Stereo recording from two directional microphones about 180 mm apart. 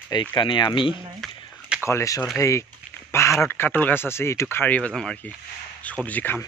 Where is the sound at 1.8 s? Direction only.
15° left (ahead or behind).